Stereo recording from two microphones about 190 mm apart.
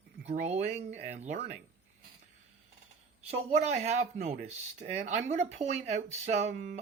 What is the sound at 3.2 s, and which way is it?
Speech, 35° right (ahead or behind).